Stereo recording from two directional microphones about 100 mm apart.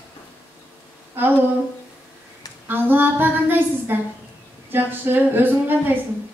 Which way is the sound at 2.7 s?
20° right (ahead or behind).